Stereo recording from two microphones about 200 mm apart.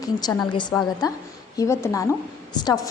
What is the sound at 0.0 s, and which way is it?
A woman's voice, 20° left (ahead or behind).